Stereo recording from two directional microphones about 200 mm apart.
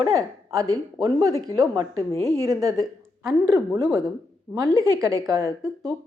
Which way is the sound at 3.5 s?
15° right (ahead or behind).